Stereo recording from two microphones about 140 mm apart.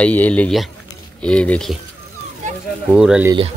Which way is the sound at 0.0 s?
10° left (ahead or behind).